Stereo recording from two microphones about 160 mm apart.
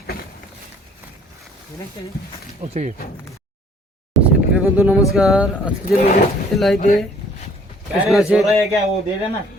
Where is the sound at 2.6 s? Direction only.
50° right (ahead or behind).